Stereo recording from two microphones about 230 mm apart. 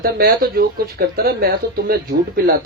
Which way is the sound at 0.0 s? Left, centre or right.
Right.